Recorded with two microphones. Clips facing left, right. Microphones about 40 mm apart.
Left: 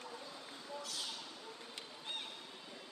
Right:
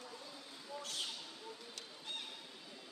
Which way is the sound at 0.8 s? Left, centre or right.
Right.